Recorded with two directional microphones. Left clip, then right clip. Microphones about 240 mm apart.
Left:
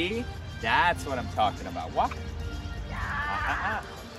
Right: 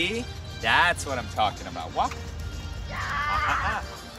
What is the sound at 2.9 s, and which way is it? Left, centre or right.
Music, right.